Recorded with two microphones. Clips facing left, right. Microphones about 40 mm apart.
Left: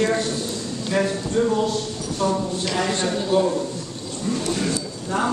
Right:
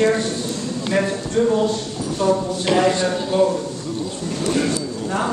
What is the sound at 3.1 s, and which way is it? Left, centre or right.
Speech, centre.